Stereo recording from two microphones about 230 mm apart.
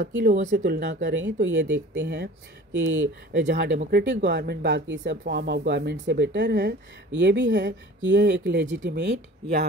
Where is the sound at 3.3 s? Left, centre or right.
Right.